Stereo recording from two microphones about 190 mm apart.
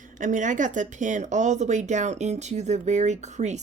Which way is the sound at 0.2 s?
40° right (ahead or behind).